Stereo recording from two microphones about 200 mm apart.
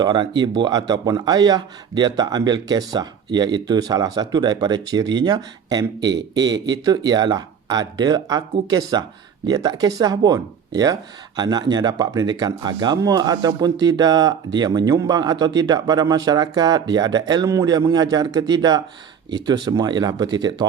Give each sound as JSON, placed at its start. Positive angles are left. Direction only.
{"t": 0.0, "sound": "speech", "side_deg": -20}
{"t": 6.0, "sound": "speech", "side_deg": -60}
{"t": 6.3, "sound": "speech", "side_deg": -20}